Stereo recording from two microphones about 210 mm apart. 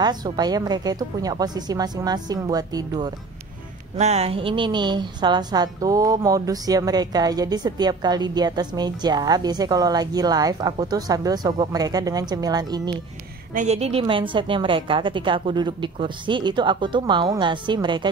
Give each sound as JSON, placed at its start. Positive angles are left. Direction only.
{"t": 0.0, "sound": "a woman's voice", "side_deg": -20}
{"t": 4.0, "sound": "a woman's voice", "side_deg": -30}
{"t": 13.5, "sound": "a woman's voice", "side_deg": -35}